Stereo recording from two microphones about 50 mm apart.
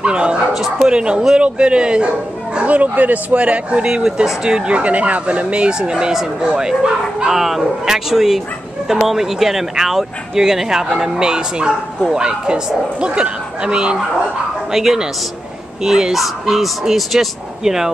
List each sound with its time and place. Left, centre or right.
0.0 s speech: right
3.8 s speech: centre
7.3 s speech: centre
14.7 s speech: centre